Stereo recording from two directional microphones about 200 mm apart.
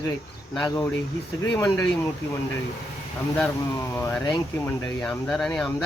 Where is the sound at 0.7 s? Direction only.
15° left (ahead or behind).